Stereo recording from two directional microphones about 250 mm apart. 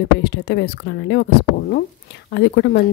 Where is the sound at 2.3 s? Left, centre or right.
Left.